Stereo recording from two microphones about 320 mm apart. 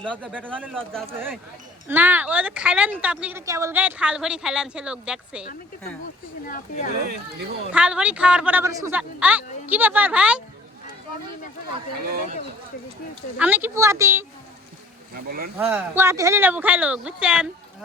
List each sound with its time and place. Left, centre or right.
0.0 s speech: centre
7.1 s speech: right
7.7 s speech: centre
13.4 s a woman's voice: centre
15.1 s speech: right
15.5 s speech: centre